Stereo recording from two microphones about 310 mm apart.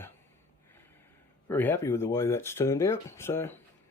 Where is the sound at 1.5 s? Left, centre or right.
Centre.